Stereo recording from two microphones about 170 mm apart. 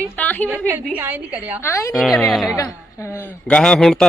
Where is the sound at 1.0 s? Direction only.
10° right (ahead or behind).